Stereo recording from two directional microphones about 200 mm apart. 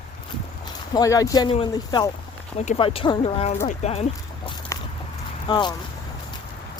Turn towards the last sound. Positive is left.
turn(degrees=20)  # may be behind; listen again after turning